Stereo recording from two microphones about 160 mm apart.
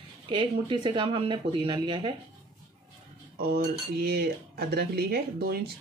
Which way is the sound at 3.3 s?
75° right (ahead or behind).